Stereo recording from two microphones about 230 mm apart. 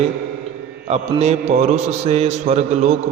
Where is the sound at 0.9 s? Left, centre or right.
Right.